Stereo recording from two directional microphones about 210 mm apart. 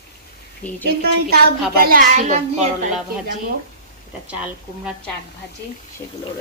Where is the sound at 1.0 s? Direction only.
45° right (ahead or behind); by 2.7 s 30° right (ahead or behind).